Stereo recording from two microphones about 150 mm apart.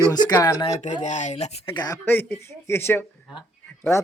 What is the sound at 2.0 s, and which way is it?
Speech, 10° left (ahead or behind).